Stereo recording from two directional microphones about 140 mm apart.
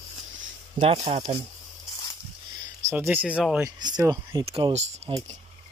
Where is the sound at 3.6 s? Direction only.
30° right (ahead or behind).